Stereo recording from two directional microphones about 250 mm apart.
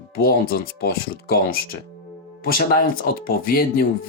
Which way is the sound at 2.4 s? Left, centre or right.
Left.